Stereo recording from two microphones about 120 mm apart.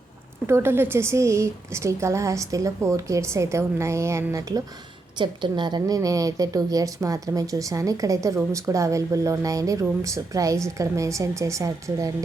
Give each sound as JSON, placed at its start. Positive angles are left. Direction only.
{"t": 0.4, "sound": "a woman's voice", "side_deg": -20}
{"t": 5.1, "sound": "a woman's voice", "side_deg": -40}